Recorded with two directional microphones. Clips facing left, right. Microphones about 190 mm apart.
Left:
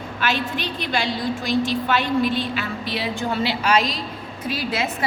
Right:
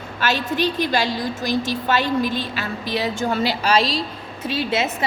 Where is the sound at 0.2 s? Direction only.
40° right (ahead or behind).